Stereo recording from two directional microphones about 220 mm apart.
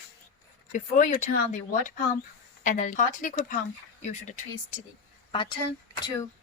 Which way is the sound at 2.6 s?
35° left (ahead or behind).